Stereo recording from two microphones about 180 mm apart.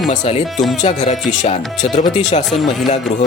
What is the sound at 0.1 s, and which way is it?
Speech, 40° left (ahead or behind).